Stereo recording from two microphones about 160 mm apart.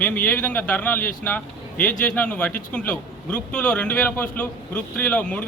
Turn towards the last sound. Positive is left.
turn(degrees=10)  # may be behind; listen again after turning